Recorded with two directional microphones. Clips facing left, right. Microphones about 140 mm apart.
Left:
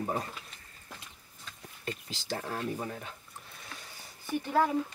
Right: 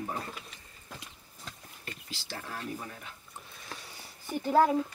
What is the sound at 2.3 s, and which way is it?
Speech, 40° left (ahead or behind).